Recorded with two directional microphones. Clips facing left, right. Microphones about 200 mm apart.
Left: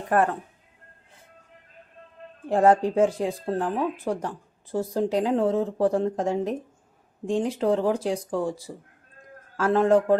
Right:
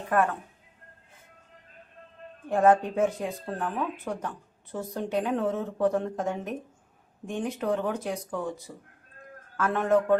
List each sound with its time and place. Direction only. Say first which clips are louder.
0.1 s speech: left 3 dB; 35° left (ahead or behind)
2.5 s speech: left 2 dB; 30° left (ahead or behind)
7.6 s a man's voice: left 4 dB; 30° left (ahead or behind)